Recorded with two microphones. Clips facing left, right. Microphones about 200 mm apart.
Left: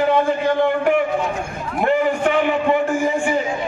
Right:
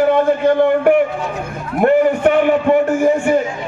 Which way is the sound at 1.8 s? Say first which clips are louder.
Right 6 dB; 55° right (ahead or behind).